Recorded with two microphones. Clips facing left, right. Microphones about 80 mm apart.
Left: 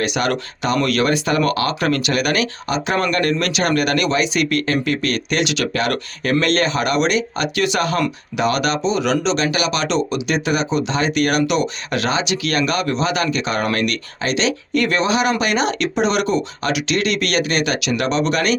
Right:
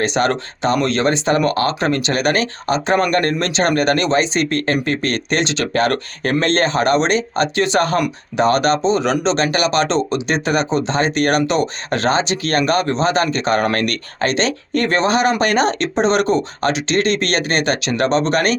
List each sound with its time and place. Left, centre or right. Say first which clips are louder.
0.0 s speech: right 3 dB; right